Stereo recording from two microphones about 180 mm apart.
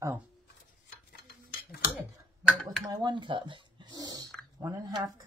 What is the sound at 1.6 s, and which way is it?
Tick-tock, 55° left (ahead or behind).